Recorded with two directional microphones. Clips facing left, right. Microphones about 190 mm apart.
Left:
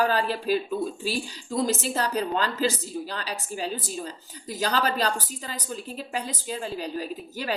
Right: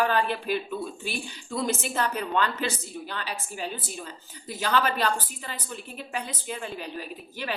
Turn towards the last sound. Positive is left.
turn(degrees=40)  # may be behind; listen again after turning